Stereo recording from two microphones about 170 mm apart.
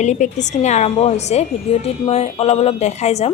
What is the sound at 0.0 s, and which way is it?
A woman's voice, 45° left (ahead or behind).